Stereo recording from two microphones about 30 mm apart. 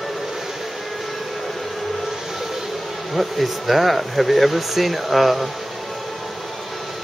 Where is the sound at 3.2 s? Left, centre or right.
Centre.